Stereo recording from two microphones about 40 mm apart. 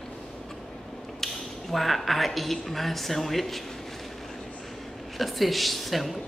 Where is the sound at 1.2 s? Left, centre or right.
Centre.